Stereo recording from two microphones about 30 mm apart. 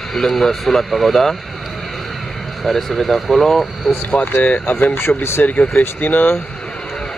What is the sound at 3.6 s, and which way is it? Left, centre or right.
Speech, centre.